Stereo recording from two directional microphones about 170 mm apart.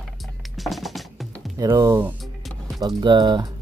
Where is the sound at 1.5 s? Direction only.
20° right (ahead or behind).